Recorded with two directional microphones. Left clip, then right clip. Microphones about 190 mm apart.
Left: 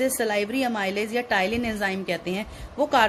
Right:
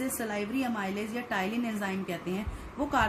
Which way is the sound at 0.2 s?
45° left (ahead or behind).